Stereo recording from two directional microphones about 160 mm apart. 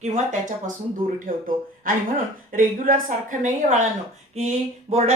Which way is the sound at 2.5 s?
60° right (ahead or behind).